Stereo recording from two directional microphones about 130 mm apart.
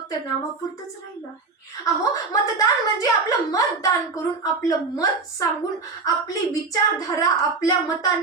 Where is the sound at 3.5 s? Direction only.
25° left (ahead or behind).